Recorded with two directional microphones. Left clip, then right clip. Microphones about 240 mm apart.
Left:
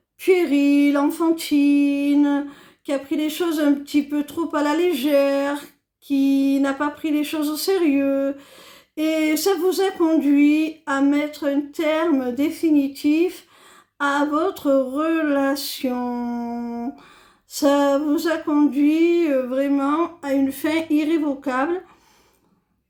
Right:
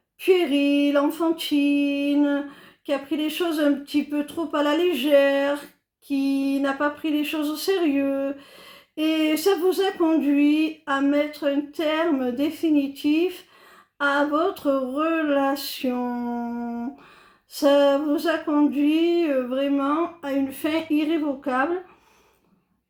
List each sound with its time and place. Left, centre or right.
0.3 s speech: left